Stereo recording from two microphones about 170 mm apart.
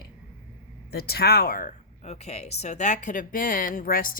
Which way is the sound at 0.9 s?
65° left (ahead or behind).